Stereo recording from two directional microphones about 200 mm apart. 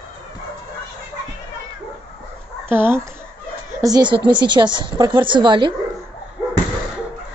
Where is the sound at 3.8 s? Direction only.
20° right (ahead or behind).